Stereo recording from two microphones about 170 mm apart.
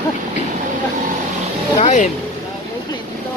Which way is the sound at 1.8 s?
45° left (ahead or behind).